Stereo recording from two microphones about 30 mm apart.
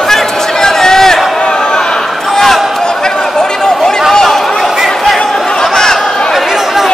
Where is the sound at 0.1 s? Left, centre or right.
Centre.